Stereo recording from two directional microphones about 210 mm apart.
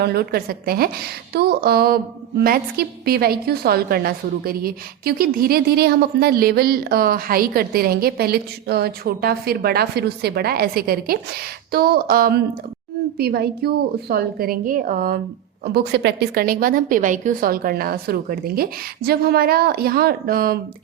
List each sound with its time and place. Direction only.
0.0 s a woman's voice: 50° right (ahead or behind)